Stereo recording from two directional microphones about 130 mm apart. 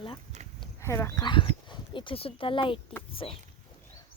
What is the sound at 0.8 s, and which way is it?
Speech, 20° left (ahead or behind).